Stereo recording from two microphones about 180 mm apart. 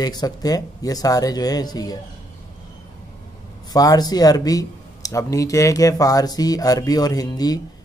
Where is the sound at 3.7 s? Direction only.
20° left (ahead or behind).